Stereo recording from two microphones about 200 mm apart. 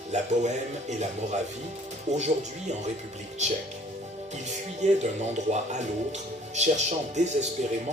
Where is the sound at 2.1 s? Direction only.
35° right (ahead or behind).